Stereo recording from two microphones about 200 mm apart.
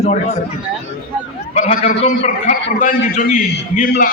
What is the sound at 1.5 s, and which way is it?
A man's voice, 35° left (ahead or behind).